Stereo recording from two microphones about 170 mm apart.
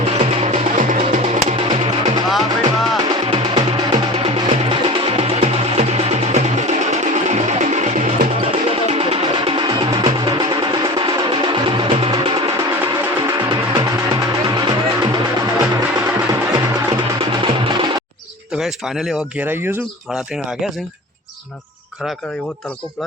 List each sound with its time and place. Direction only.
0.0 s music: 35° right (ahead or behind)
3.1 s music: 30° right (ahead or behind)
18.5 s speech: centre (ahead or behind)